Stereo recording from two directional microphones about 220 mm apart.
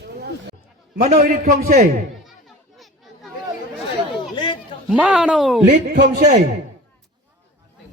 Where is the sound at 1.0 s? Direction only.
30° right (ahead or behind).